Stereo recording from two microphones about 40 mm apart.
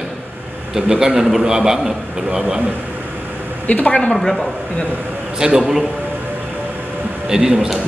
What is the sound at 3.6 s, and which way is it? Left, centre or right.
Speech, left.